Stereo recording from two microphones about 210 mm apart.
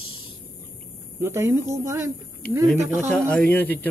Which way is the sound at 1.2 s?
10° right (ahead or behind).